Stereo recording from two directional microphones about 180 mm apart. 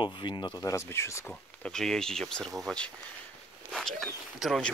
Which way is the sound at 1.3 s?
5° left (ahead or behind).